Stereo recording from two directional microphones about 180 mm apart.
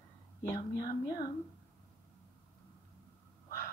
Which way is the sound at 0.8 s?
25° left (ahead or behind).